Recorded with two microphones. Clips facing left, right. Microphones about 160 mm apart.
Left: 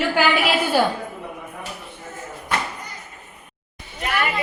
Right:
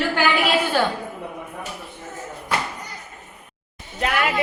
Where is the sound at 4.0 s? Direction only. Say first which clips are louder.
Right 2 dB; 90° right.